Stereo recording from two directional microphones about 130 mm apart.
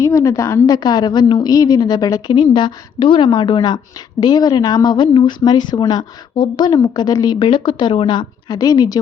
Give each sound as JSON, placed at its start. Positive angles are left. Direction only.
{"t": 0.0, "sound": "a woman's voice", "side_deg": 25}